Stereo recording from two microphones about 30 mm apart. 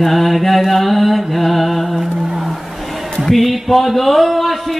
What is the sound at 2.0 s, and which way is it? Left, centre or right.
Mantra, centre.